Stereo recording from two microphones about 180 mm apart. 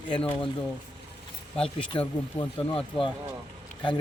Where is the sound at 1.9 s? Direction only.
30° left (ahead or behind).